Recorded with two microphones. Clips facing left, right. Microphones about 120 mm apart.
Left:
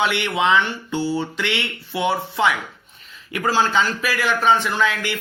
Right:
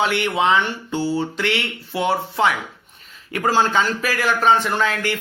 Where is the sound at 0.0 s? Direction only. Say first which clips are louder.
Right 1 dB; 40° right (ahead or behind).